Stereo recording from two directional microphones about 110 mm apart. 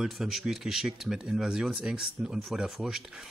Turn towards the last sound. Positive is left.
turn(degrees=-5)  # may be behind; listen again after turning